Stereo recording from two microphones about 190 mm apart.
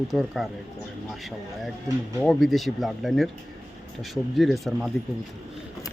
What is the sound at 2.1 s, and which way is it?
Speech, centre (ahead or behind).